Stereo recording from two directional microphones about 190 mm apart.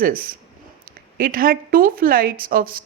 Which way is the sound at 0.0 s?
50° right (ahead or behind).